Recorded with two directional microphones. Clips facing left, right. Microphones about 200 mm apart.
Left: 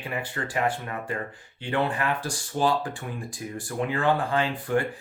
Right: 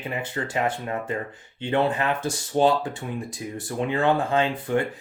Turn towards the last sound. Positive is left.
turn(degrees=-25)  # may be behind; listen again after turning